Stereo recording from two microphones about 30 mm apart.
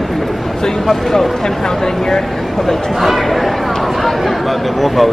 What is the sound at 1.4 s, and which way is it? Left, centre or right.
Speech, centre.